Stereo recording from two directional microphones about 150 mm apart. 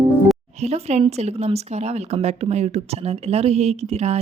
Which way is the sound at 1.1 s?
45° right (ahead or behind).